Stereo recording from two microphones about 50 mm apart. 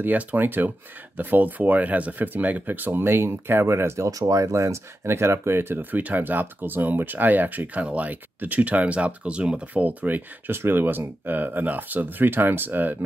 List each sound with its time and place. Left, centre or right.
0.0 s speech: right
10.5 s speech: right